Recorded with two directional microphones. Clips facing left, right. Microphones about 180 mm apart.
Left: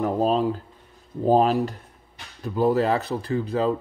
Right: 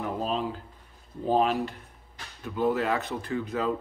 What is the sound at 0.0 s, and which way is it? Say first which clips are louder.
Speech: left 8 dB; 40° left (ahead or behind).